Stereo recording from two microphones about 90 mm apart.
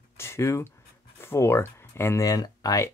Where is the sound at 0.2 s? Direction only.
30° left (ahead or behind).